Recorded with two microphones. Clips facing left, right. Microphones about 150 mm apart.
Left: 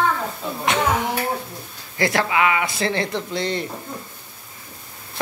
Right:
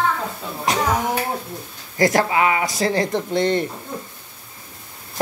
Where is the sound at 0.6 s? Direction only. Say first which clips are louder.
Even; 35° right (ahead or behind).